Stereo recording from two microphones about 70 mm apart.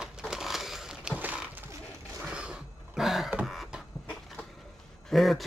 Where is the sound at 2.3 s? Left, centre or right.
Centre.